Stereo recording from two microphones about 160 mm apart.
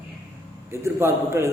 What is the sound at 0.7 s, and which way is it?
Speech, 15° right (ahead or behind).